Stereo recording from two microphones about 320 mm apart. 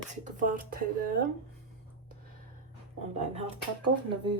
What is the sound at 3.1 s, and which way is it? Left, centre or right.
Speech, centre.